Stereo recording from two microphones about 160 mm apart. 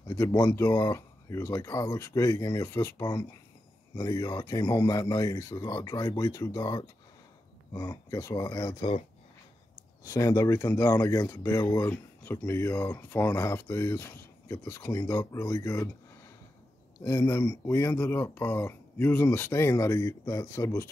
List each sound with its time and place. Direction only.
0.1 s speech: 15° left (ahead or behind)
10.0 s speech: 20° left (ahead or behind)
17.0 s speech: 15° left (ahead or behind)